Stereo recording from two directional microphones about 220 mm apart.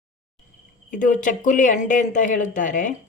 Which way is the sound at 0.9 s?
35° left (ahead or behind).